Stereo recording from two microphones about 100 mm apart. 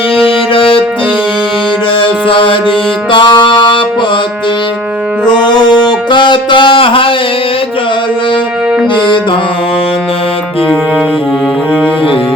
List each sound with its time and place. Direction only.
0.2 s music: 65° left (ahead or behind)
2.0 s music: 60° left (ahead or behind)
5.3 s music: 45° left (ahead or behind); by 7.1 s 60° left (ahead or behind)